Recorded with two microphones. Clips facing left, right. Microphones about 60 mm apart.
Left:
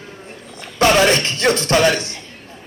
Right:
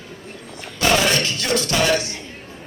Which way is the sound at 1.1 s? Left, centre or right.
Left.